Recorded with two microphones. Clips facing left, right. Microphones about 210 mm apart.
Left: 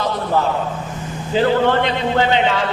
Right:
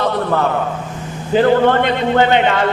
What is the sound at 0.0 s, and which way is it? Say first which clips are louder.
Speech: right 2 dB; 60° right (ahead or behind).